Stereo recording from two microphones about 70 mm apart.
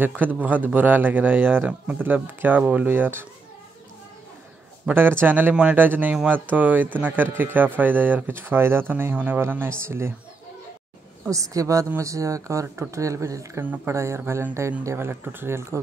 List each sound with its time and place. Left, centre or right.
0.0 s speech: right
2.9 s speech: right
4.9 s speech: right
11.3 s speech: right
13.6 s speech: right